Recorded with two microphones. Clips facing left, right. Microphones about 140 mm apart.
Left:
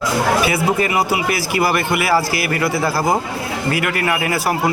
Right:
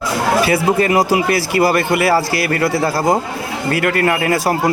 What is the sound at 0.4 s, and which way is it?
Speech, 35° right (ahead or behind).